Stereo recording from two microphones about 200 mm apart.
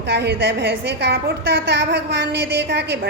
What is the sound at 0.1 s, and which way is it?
A woman's voice, 55° right (ahead or behind).